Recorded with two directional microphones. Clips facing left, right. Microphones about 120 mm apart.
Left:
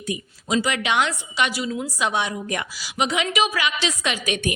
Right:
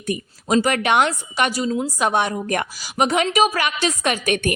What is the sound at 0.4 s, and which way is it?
A woman's voice, 50° right (ahead or behind).